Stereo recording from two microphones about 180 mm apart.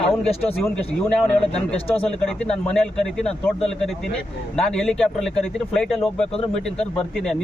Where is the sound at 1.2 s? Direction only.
5° left (ahead or behind).